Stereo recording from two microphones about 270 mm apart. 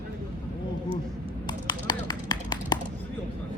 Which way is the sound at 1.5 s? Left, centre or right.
Centre.